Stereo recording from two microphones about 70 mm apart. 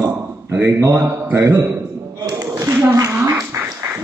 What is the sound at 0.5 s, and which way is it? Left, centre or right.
Speech, right.